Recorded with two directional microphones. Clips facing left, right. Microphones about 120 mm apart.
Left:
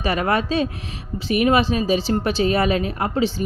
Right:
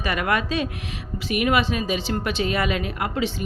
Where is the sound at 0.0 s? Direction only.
30° left (ahead or behind).